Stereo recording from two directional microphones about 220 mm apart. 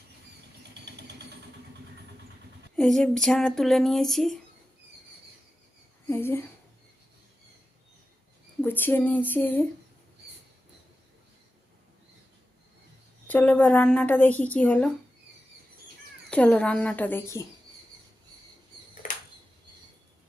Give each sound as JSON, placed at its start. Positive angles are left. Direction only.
{"t": 2.7, "sound": "speech", "side_deg": 0}
{"t": 6.1, "sound": "speech", "side_deg": 10}
{"t": 8.6, "sound": "a woman's voice", "side_deg": 10}
{"t": 13.2, "sound": "a woman's voice", "side_deg": 5}
{"t": 16.3, "sound": "a woman's voice", "side_deg": 5}
{"t": 19.0, "sound": "a sound", "side_deg": 35}